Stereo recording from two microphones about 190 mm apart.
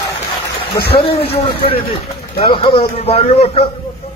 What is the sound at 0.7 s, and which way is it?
Speech, 55° left (ahead or behind).